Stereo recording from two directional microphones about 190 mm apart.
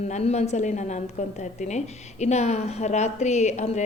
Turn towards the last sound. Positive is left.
turn(degrees=35)  # may be behind; listen again after turning